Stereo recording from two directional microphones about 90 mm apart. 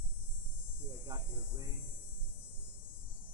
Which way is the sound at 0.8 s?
50° right (ahead or behind).